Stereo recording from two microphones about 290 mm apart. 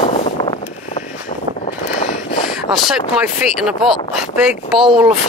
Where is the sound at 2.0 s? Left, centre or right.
Left.